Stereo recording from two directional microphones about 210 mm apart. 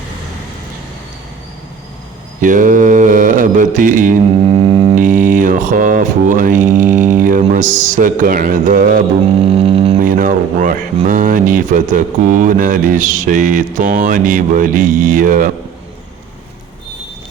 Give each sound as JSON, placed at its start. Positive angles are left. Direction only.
{"t": 2.4, "sound": "mantra", "side_deg": -40}
{"t": 4.9, "sound": "speech", "side_deg": -40}
{"t": 9.6, "sound": "music", "side_deg": -25}
{"t": 10.0, "sound": "speech", "side_deg": -40}